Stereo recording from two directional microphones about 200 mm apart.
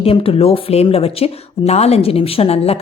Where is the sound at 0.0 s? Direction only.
30° left (ahead or behind).